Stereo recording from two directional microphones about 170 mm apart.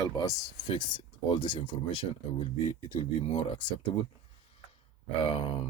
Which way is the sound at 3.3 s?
30° left (ahead or behind).